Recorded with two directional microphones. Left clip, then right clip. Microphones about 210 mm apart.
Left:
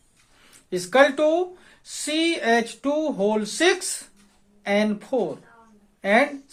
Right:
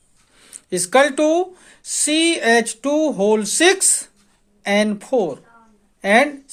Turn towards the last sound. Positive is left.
turn(degrees=-40)  # may be behind; listen again after turning